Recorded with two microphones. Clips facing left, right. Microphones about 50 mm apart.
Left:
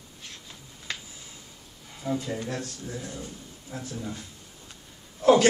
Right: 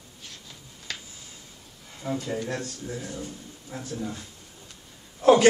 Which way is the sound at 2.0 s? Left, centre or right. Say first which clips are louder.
Left 1 dB; right.